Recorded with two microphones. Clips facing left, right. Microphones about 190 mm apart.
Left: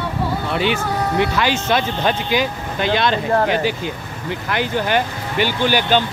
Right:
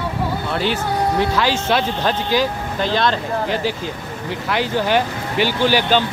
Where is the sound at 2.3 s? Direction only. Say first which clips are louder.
Right 1 dB; 60° left (ahead or behind).